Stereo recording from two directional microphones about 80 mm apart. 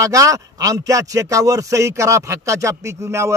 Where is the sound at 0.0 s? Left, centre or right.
Right.